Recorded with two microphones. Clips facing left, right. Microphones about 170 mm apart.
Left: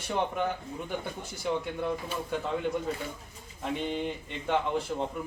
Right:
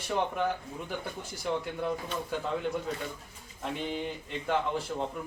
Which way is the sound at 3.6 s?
Centre (ahead or behind).